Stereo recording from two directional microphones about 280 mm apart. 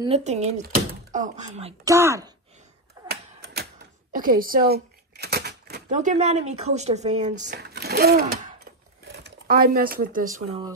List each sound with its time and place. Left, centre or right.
0.0 s speech: right
2.0 s speech: centre
3.1 s a sound: right
4.1 s speech: right
7.4 s speech: right